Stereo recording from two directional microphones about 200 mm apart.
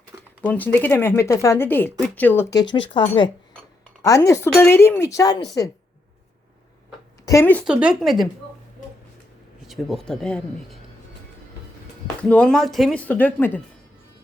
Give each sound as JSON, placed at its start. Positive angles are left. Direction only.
{"t": 0.4, "sound": "speech", "side_deg": 10}
{"t": 4.0, "sound": "speech", "side_deg": 15}
{"t": 7.3, "sound": "speech", "side_deg": 10}
{"t": 7.6, "sound": "speech", "side_deg": -5}
{"t": 9.6, "sound": "speech", "side_deg": 0}
{"t": 12.3, "sound": "speech", "side_deg": 5}